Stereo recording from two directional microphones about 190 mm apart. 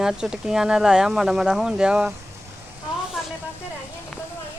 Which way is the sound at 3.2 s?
Centre (ahead or behind).